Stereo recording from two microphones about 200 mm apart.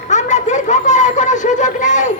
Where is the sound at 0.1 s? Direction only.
35° left (ahead or behind).